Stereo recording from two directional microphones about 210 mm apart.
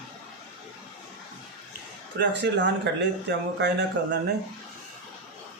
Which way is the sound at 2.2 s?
55° right (ahead or behind).